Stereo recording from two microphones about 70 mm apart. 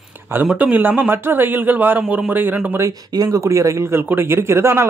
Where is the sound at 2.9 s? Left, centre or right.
Right.